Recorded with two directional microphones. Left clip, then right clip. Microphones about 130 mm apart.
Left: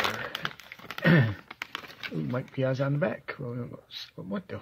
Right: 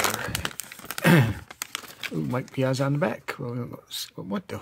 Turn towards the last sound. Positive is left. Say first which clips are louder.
# right 4 dB
turn(degrees=-40)  # may be behind; listen again after turning